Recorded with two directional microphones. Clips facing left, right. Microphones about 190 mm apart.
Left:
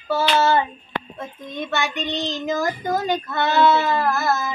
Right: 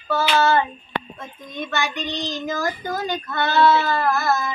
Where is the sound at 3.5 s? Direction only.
20° left (ahead or behind).